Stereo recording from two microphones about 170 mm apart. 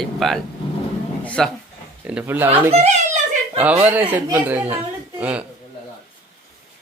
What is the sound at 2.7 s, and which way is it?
Speech, 45° right (ahead or behind).